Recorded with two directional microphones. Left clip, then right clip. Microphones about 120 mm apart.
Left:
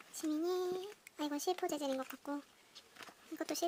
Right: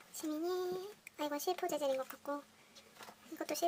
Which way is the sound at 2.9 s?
25° left (ahead or behind).